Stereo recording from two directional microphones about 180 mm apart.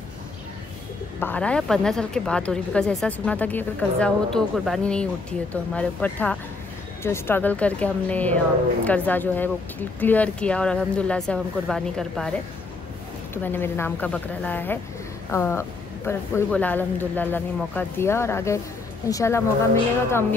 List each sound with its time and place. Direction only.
1.2 s a woman's voice: 10° left (ahead or behind)
13.3 s speech: 10° left (ahead or behind)